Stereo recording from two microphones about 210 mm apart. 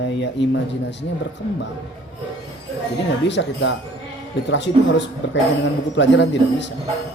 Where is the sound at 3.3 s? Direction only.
60° left (ahead or behind).